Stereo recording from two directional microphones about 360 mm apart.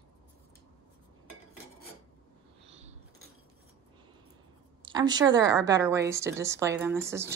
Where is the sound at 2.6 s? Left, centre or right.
Centre.